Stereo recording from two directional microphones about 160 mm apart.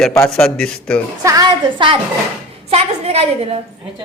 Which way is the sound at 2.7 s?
40° right (ahead or behind).